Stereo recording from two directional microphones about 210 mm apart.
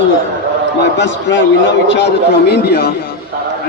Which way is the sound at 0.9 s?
60° left (ahead or behind).